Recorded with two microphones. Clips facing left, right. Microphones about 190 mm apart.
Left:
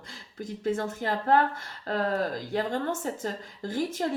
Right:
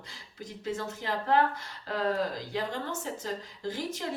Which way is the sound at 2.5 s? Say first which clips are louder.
Left 5 dB; 50° left (ahead or behind).